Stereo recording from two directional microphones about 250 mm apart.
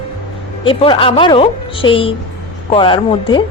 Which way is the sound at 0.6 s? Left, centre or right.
Centre.